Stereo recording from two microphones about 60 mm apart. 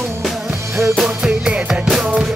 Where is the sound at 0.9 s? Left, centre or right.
Centre.